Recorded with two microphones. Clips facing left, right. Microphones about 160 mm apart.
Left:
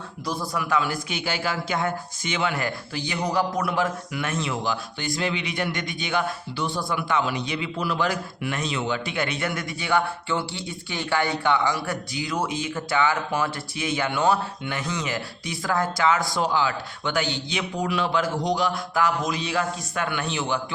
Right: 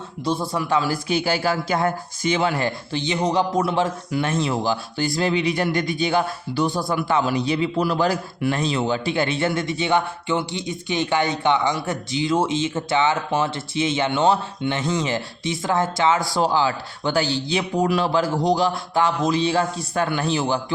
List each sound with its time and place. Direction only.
0.3 s a man's voice: 25° right (ahead or behind)